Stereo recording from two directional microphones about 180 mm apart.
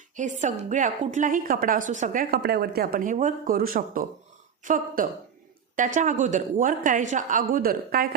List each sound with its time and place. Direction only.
0.2 s a woman's voice: 45° right (ahead or behind)